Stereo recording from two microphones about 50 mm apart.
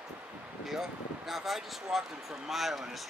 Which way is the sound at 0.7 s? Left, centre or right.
Centre.